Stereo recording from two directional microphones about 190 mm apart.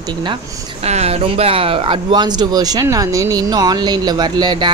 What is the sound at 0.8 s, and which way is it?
Speech, 35° right (ahead or behind).